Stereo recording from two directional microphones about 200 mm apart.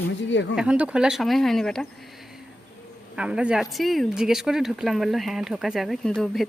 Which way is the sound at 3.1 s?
5° right (ahead or behind).